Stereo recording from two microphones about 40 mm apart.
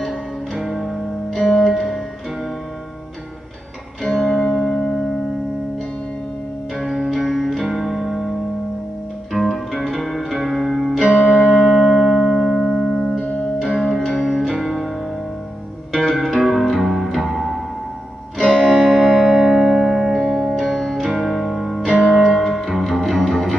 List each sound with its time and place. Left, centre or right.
0.6 s music: centre
4.0 s music: centre
7.4 s music: centre
9.3 s music: centre
11.0 s music: right
11.8 s music: centre
12.7 s music: centre
15.9 s music: centre
18.5 s music: centre
20.7 s music: centre
21.0 s music: centre
22.2 s music: centre